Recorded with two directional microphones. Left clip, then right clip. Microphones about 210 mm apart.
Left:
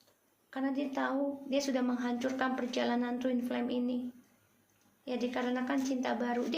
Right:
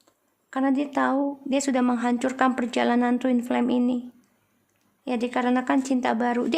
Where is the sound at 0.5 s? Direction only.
40° right (ahead or behind).